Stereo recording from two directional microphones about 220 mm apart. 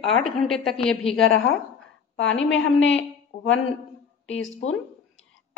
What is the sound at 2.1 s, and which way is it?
Speech, 60° left (ahead or behind).